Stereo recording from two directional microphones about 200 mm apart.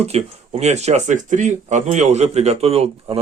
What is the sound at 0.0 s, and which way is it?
Speech, 30° right (ahead or behind).